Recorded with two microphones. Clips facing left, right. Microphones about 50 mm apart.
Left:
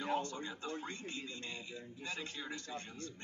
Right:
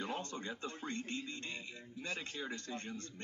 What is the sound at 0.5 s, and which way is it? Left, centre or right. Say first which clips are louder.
A man's voice: even; right.